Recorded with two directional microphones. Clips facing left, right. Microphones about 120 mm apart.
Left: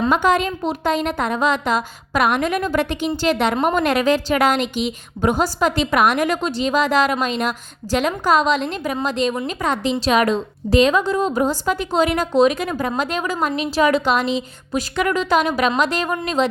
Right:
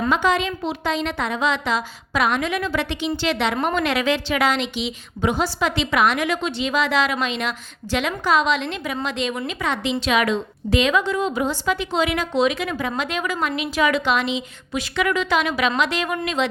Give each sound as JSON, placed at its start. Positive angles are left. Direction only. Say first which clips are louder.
{"t": 0.1, "sound": "a woman's voice", "louder": "left 1 dB", "side_deg": 50}
{"t": 3.5, "sound": "a woman's voice", "louder": "left 4 dB", "side_deg": 15}
{"t": 3.8, "sound": "a woman's voice", "louder": "left 4 dB", "side_deg": 45}